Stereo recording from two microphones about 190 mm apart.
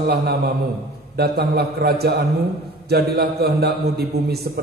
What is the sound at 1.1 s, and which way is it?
A man's voice, 55° right (ahead or behind).